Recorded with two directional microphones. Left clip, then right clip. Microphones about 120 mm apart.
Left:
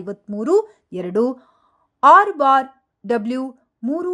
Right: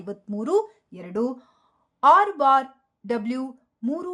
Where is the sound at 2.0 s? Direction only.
40° left (ahead or behind).